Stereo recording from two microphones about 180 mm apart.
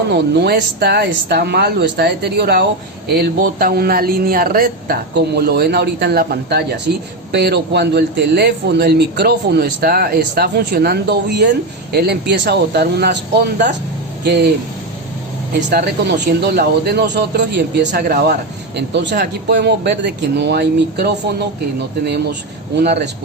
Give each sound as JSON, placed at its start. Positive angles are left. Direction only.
{"t": 0.1, "sound": "a man's voice", "side_deg": -65}
{"t": 14.3, "sound": "a man's voice", "side_deg": -65}
{"t": 15.7, "sound": "a man's voice", "side_deg": -70}